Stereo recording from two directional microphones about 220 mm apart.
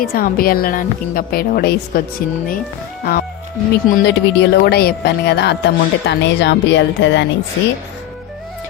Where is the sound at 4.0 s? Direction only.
50° left (ahead or behind).